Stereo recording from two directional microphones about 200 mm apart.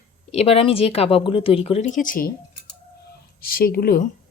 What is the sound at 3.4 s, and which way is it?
Speech, 45° left (ahead or behind).